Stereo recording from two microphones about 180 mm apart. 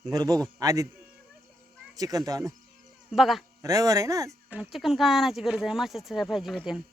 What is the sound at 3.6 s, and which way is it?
Speech, 20° right (ahead or behind).